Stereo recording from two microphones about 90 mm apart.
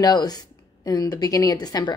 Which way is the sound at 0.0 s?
50° left (ahead or behind).